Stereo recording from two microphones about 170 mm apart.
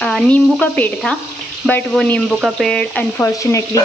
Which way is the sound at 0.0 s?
5° left (ahead or behind).